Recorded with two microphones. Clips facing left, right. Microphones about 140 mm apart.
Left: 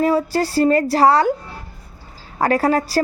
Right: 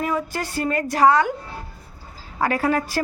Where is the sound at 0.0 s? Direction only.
35° left (ahead or behind).